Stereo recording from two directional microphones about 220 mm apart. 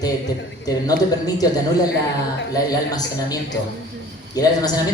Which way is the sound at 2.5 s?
15° left (ahead or behind).